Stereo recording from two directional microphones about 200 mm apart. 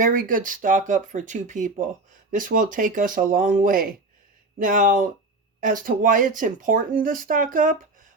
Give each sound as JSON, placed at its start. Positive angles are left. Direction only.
{"t": 0.0, "sound": "speech", "side_deg": -45}